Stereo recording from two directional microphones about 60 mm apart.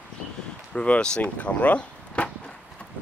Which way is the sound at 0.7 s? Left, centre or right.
Centre.